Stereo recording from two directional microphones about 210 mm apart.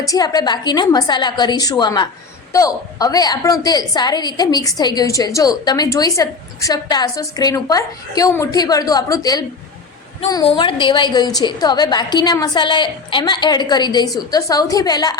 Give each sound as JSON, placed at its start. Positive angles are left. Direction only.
{"t": 0.1, "sound": "a woman's voice", "side_deg": 20}